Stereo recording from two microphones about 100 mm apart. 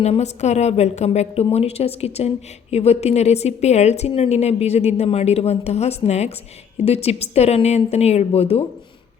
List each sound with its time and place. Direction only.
0.0 s a woman's voice: 90° left